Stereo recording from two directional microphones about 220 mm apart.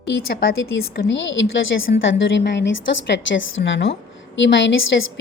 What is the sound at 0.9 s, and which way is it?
A woman's voice, 50° left (ahead or behind).